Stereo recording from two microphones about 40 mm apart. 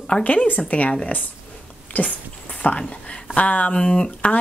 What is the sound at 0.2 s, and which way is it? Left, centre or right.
Speech, left.